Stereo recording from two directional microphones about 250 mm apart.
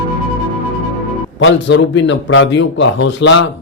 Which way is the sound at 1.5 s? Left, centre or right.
Left.